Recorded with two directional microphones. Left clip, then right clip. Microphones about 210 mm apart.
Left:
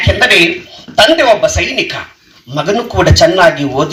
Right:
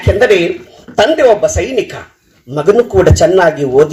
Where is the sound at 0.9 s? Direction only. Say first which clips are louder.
Left 1 dB; 50° right (ahead or behind).